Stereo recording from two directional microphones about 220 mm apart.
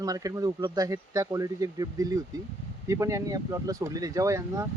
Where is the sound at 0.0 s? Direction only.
15° right (ahead or behind).